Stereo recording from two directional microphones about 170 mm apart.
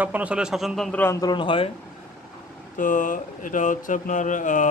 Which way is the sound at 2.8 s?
50° left (ahead or behind).